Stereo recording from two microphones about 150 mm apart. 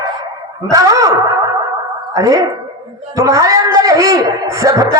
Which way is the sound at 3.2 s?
20° right (ahead or behind).